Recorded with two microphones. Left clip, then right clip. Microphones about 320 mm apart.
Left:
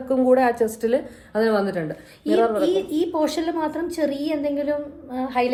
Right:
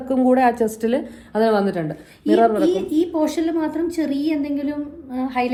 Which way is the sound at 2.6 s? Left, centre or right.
Left.